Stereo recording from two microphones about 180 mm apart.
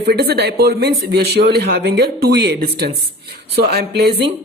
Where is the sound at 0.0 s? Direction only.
65° right (ahead or behind).